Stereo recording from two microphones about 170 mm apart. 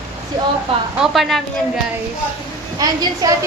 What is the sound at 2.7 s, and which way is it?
Speech, 20° right (ahead or behind).